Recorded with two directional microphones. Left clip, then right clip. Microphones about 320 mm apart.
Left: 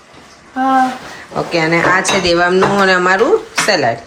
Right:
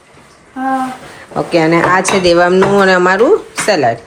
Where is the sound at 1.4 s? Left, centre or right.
Centre.